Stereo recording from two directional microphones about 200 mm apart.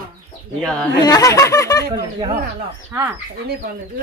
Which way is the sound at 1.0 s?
20° left (ahead or behind).